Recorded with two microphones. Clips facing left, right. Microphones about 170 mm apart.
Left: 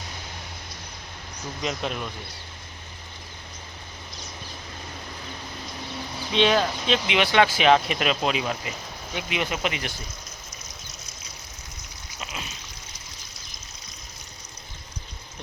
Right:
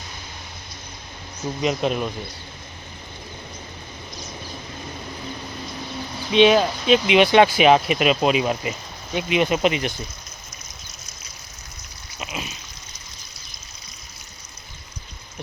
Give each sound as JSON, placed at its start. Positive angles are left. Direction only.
{"t": 1.6, "sound": "speech", "side_deg": -20}
{"t": 6.3, "sound": "speech", "side_deg": -10}
{"t": 12.2, "sound": "a sound", "side_deg": -15}